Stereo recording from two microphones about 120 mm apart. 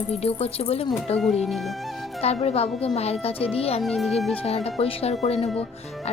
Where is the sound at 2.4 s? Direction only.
55° left (ahead or behind).